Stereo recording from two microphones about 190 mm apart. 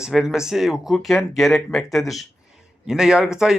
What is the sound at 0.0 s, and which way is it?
Speech, centre (ahead or behind).